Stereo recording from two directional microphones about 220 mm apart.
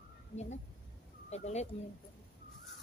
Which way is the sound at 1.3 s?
30° left (ahead or behind).